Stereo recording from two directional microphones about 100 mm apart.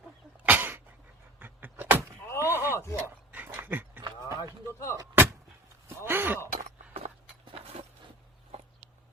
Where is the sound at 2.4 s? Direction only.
20° right (ahead or behind).